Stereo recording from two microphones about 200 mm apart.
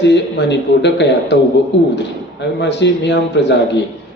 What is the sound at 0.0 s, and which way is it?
Speech, 60° left (ahead or behind).